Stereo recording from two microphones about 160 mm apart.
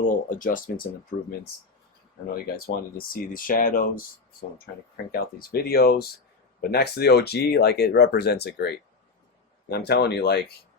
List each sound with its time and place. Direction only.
0.0 s speech: 55° left (ahead or behind)
2.6 s speech: 70° left (ahead or behind)
5.1 s speech: 65° left (ahead or behind)
6.6 s speech: 85° left